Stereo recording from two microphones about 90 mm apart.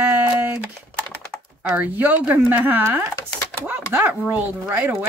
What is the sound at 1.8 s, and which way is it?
Speech, 20° right (ahead or behind).